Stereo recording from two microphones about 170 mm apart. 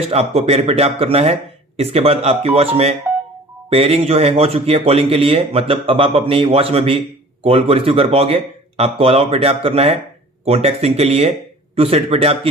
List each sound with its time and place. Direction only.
0.1 s speech: 35° right (ahead or behind)